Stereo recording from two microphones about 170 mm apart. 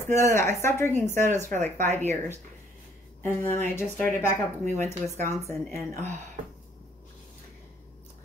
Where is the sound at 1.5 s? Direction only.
45° right (ahead or behind).